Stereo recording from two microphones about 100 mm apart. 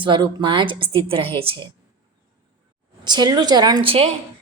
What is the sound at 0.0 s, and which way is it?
A woman's voice, 50° right (ahead or behind).